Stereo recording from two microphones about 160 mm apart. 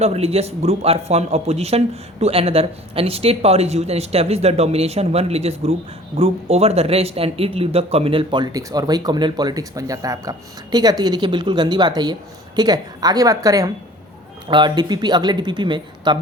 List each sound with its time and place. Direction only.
0.0 s a man's voice: 40° right (ahead or behind)